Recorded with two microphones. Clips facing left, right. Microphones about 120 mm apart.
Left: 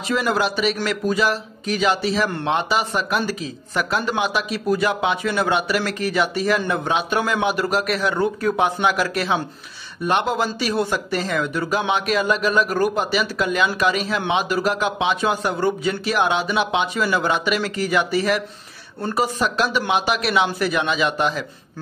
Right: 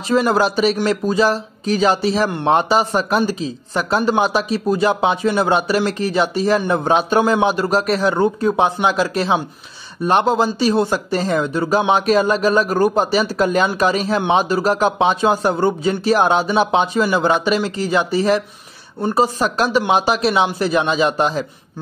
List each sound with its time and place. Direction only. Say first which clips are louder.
0.1 s speech: right 5 dB; 35° right (ahead or behind)